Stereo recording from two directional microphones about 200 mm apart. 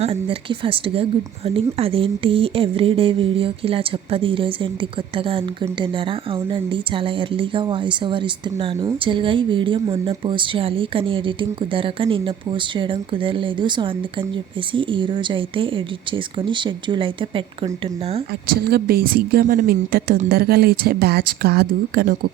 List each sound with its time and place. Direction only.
0.0 s speech: 30° right (ahead or behind)
18.5 s speech: 50° right (ahead or behind)